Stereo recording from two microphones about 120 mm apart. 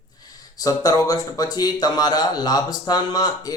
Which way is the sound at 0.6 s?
30° left (ahead or behind).